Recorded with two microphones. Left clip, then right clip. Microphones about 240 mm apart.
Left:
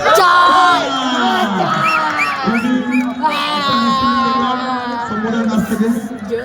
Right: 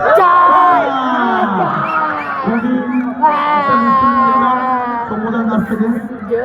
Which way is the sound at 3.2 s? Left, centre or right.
Centre.